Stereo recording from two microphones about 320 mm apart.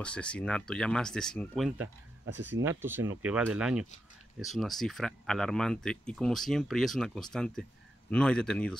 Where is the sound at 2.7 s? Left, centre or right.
Centre.